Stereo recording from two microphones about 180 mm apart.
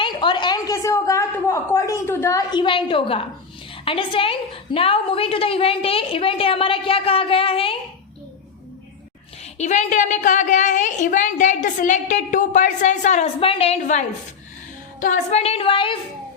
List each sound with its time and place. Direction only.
0.0 s a sound: 25° left (ahead or behind)
3.8 s a woman's voice: 30° left (ahead or behind)
9.6 s a woman's voice: 40° left (ahead or behind)
15.0 s a woman's voice: 40° left (ahead or behind)